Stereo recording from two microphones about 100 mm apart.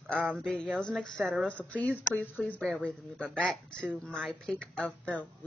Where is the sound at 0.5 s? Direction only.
5° left (ahead or behind).